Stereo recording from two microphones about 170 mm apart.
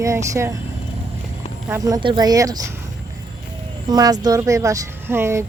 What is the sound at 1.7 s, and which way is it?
Speech, 20° right (ahead or behind).